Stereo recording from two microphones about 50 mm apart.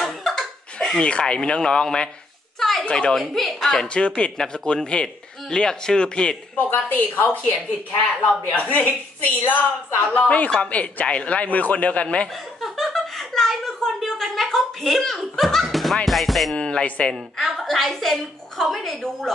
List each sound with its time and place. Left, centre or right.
0.0 s laughter: centre
0.7 s a woman's voice: centre
3.2 s speech: centre
3.8 s speech: left
6.5 s a woman's voice: left
12.5 s a sound: centre
16.1 s speech: centre
16.5 s music: centre
16.8 s speech: left
17.1 s a woman's voice: centre